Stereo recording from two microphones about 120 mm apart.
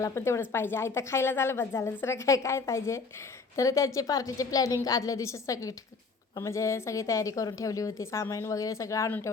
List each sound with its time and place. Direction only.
0.0 s a woman's voice: 20° left (ahead or behind)